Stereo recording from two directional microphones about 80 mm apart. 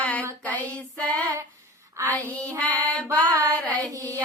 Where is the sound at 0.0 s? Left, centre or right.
Centre.